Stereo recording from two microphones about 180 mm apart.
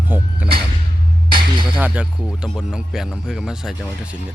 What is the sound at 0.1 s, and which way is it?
Speech, 10° right (ahead or behind).